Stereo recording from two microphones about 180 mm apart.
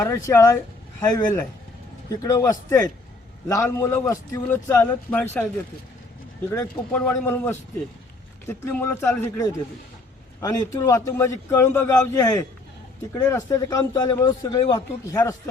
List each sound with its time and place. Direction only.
0.0 s speech: 15° left (ahead or behind)
6.5 s speech: 15° left (ahead or behind)
7.0 s a man's voice: 5° left (ahead or behind); by 15.2 s 25° left (ahead or behind)